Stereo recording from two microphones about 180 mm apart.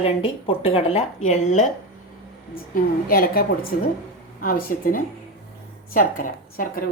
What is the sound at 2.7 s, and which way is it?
A woman's voice, 55° left (ahead or behind).